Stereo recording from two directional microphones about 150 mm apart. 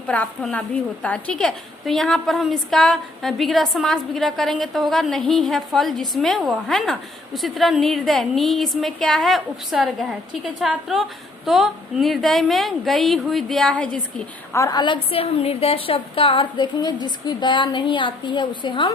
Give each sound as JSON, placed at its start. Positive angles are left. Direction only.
{"t": 0.1, "sound": "a woman's voice", "side_deg": 10}
{"t": 14.5, "sound": "a woman's voice", "side_deg": 20}